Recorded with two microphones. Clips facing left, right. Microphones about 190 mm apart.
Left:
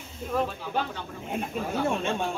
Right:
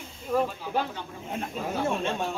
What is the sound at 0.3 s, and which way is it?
Speech, 5° right (ahead or behind).